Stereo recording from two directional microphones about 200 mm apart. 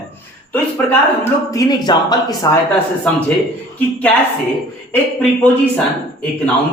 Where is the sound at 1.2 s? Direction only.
20° left (ahead or behind).